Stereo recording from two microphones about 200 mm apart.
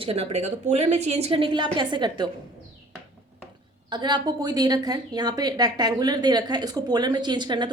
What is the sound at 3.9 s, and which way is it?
A woman's voice, 20° right (ahead or behind).